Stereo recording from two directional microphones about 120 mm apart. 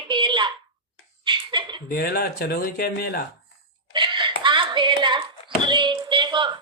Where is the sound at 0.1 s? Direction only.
40° right (ahead or behind).